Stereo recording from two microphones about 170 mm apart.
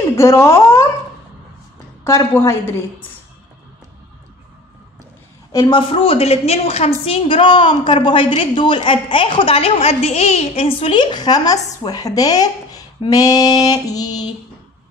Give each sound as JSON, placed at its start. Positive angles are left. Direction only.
{"t": 0.1, "sound": "speech", "side_deg": 15}
{"t": 2.0, "sound": "a woman's voice", "side_deg": 15}
{"t": 5.5, "sound": "a woman's voice", "side_deg": 25}